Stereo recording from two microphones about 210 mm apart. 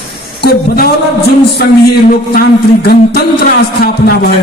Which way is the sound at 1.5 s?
45° left (ahead or behind).